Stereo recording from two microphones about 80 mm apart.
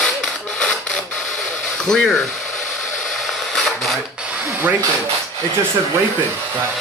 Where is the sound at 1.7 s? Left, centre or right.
Centre.